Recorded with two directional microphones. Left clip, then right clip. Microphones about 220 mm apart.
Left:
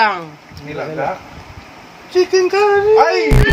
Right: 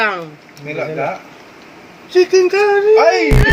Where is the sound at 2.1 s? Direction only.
35° right (ahead or behind).